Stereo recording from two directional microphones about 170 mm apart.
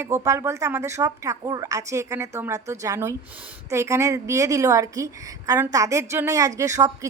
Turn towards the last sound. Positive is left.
turn(degrees=-20)  # may be behind; listen again after turning